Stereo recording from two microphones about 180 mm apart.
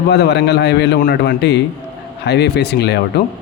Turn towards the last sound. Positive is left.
turn(degrees=65)  # may be behind; listen again after turning